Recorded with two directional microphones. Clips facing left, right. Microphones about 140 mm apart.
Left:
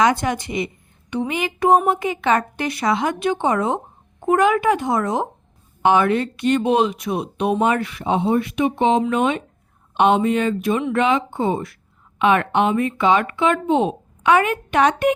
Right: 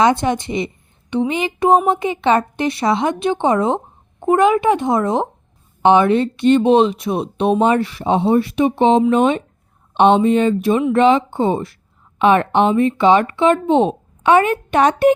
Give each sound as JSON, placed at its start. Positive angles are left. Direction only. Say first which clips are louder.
{"t": 0.0, "sound": "speech", "louder": "right 3 dB", "side_deg": -25}